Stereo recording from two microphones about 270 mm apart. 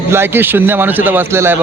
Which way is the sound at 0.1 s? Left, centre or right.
Centre.